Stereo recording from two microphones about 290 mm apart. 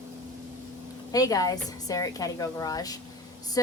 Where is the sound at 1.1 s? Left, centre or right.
Centre.